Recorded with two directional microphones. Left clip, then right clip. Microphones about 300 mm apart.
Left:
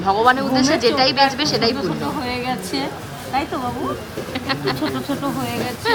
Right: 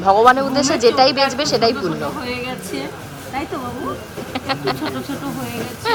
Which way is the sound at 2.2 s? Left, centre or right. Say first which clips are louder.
Left 2 dB; left.